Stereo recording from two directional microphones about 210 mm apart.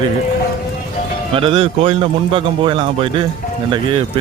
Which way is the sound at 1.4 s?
25° right (ahead or behind).